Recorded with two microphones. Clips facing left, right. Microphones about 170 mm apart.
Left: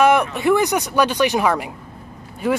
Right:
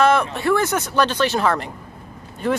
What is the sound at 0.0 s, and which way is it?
Speech, 15° left (ahead or behind).